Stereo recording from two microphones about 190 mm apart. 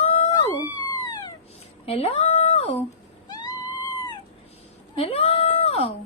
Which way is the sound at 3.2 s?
20° left (ahead or behind).